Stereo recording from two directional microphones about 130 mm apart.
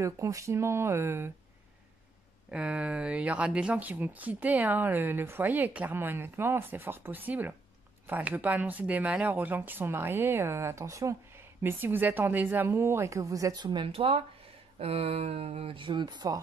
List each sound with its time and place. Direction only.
0.0 s a woman's voice: 25° right (ahead or behind)
2.5 s a woman's voice: 10° right (ahead or behind); by 16.3 s 35° right (ahead or behind)